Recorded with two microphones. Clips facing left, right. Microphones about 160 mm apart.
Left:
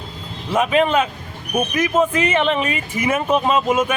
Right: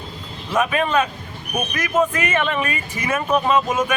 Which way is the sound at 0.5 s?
20° left (ahead or behind).